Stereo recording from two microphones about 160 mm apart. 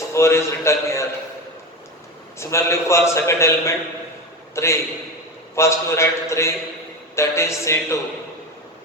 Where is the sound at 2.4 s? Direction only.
15° left (ahead or behind).